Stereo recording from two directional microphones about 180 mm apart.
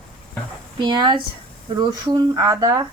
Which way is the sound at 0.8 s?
25° right (ahead or behind).